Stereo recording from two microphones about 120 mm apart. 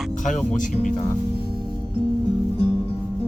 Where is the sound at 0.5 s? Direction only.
90° left.